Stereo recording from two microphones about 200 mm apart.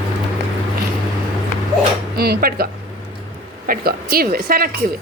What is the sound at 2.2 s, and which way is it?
Speech, 50° right (ahead or behind).